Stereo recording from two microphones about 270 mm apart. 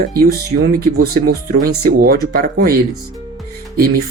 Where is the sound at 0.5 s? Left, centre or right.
Right.